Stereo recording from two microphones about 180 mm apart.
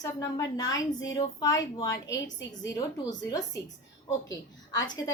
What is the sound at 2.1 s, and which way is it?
Speech, 90° left.